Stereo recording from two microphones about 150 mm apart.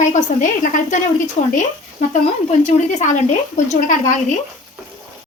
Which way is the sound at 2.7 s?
55° left (ahead or behind).